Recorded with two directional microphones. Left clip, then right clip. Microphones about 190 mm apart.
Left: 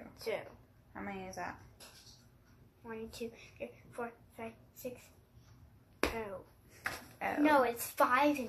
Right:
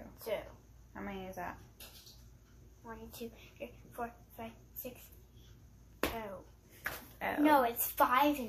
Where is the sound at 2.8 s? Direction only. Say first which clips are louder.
Left 4 dB; 35° left (ahead or behind).